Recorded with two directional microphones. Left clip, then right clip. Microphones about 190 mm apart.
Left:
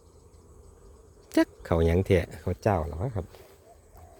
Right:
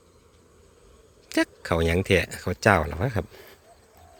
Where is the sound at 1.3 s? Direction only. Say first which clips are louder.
Right 1 dB; 20° left (ahead or behind); by 2.8 s centre (ahead or behind).